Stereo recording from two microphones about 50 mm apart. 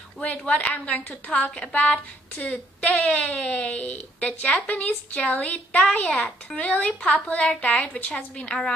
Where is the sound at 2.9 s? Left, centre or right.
Centre.